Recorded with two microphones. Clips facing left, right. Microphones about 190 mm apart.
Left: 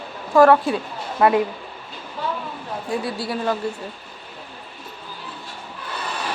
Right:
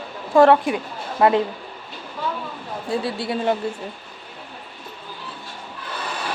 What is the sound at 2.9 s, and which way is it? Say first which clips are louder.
Speech: right 2 dB; 25° right (ahead or behind).